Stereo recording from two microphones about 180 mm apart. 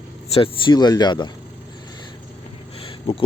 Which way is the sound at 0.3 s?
30° left (ahead or behind).